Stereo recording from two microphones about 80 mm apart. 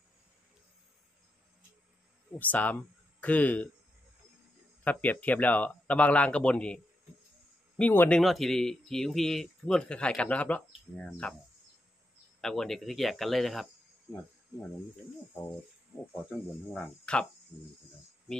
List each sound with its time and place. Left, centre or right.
2.3 s speech: left
4.8 s speech: left
8.2 s speech: centre
12.4 s speech: centre
16.3 s speech: centre